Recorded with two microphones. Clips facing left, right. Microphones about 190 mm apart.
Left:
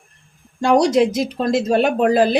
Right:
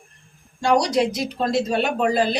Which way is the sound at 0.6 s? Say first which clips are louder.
Left 5 dB; 50° left (ahead or behind).